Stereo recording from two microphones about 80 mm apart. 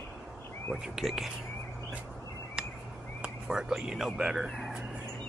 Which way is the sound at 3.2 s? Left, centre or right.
Centre.